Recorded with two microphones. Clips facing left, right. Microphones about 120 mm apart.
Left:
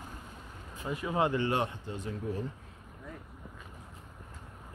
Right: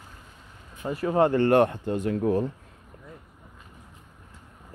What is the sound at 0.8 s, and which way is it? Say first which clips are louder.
Speech: right 8 dB; 40° right (ahead or behind).